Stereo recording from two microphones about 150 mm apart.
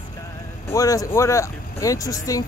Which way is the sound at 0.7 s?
20° left (ahead or behind).